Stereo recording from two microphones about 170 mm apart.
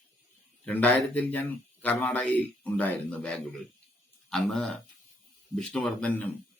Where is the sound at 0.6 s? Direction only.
10° left (ahead or behind).